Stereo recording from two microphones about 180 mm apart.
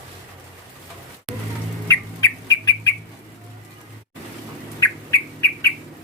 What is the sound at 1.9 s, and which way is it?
Bird, 20° left (ahead or behind).